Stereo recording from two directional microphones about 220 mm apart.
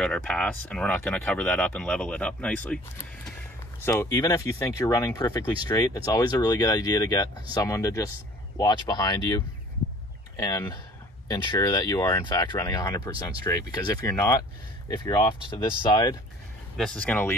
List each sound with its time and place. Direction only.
0.0 s speech: 5° left (ahead or behind); by 16.2 s 20° left (ahead or behind)
16.7 s speech: 5° left (ahead or behind)